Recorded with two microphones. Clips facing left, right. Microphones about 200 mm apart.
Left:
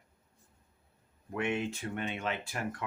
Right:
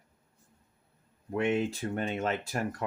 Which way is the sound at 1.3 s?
35° right (ahead or behind).